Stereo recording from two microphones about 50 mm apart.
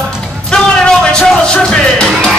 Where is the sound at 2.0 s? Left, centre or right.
Centre.